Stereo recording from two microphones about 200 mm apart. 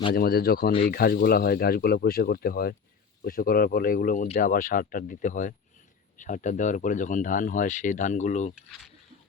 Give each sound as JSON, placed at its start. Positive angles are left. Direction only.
{"t": 0.1, "sound": "speech", "side_deg": 50}